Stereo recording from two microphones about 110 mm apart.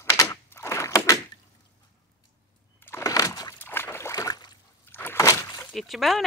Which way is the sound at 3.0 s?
30° left (ahead or behind).